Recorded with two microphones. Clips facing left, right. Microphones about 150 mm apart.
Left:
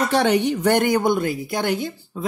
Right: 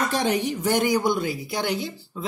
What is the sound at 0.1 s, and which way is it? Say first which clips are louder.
Speech: left 5 dB; 65° left (ahead or behind).